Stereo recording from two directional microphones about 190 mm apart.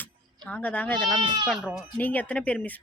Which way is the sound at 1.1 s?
25° right (ahead or behind).